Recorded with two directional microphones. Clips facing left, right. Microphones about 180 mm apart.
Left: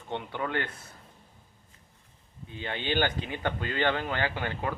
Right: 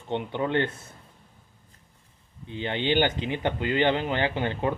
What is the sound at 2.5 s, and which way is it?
Speech, 25° right (ahead or behind).